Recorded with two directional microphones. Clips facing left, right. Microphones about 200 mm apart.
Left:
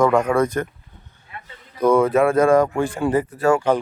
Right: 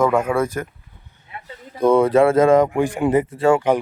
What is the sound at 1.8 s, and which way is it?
A man's voice, 25° right (ahead or behind).